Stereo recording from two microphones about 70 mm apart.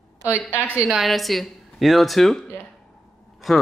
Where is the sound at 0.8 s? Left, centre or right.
Centre.